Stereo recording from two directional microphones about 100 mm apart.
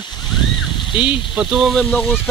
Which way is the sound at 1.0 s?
15° right (ahead or behind).